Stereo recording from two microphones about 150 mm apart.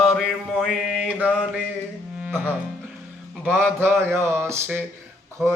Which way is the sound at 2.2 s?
10° right (ahead or behind).